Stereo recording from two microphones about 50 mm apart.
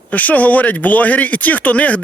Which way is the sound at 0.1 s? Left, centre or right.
Left.